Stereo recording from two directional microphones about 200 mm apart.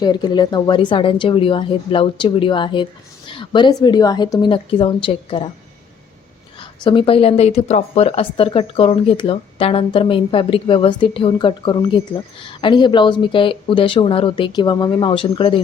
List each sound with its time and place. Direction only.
0.0 s speech: 20° left (ahead or behind)
6.8 s speech: 25° left (ahead or behind)